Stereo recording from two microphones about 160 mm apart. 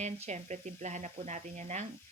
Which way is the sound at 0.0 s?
45° right (ahead or behind).